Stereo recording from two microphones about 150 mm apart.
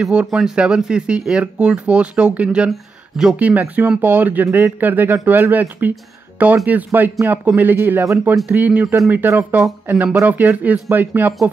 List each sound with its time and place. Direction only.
0.0 s speech: 5° right (ahead or behind)